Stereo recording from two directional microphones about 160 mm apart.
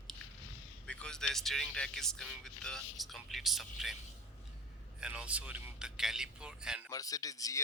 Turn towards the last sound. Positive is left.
turn(degrees=20)  # may be behind; listen again after turning